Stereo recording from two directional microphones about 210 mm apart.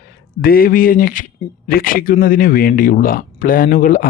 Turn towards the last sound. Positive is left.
turn(degrees=40)  # may be behind; listen again after turning